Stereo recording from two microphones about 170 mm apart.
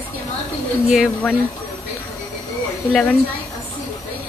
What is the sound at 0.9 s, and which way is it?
Speech, 5° right (ahead or behind).